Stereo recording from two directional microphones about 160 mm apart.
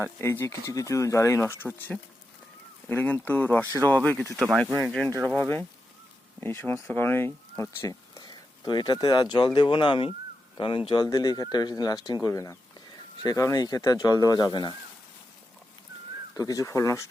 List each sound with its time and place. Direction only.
0.2 s speech: 15° left (ahead or behind)
6.4 s speech: 15° left (ahead or behind)
16.3 s speech: 20° left (ahead or behind)